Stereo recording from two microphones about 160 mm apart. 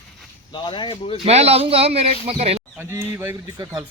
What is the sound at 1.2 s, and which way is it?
Speech, 40° right (ahead or behind).